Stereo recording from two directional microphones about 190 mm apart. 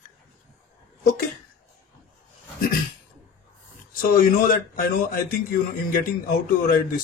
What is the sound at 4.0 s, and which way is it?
Speech, 45° left (ahead or behind).